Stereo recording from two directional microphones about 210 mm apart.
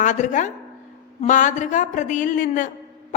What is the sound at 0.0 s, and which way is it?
A man's voice, 35° left (ahead or behind).